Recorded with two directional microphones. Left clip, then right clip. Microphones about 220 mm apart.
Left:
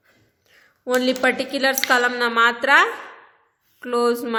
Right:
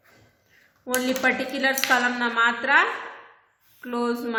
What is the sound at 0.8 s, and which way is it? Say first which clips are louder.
A woman's voice: left 4 dB; 50° left (ahead or behind).